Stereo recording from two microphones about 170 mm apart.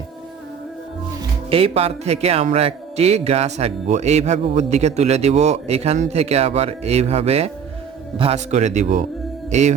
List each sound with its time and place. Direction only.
1.5 s a man's voice: 35° right (ahead or behind)